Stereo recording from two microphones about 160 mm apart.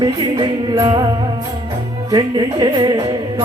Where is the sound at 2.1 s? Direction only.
25° right (ahead or behind).